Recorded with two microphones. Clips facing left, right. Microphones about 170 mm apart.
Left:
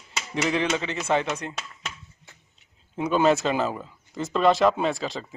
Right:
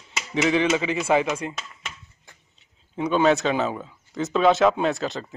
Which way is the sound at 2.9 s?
Centre (ahead or behind).